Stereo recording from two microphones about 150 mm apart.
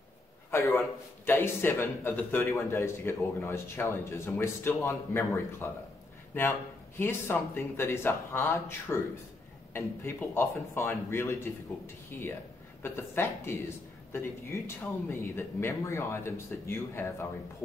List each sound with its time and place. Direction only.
0.5 s speech: 20° left (ahead or behind)
7.0 s speech: 15° left (ahead or behind)